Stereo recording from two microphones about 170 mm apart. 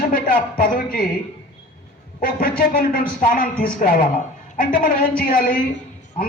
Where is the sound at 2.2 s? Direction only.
55° left (ahead or behind).